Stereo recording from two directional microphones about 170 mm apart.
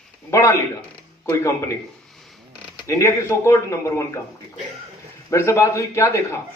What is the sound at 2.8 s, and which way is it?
A man's voice, 20° left (ahead or behind).